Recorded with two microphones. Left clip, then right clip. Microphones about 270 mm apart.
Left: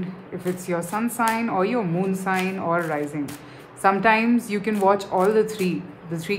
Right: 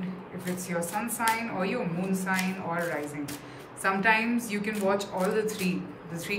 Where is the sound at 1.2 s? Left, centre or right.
Centre.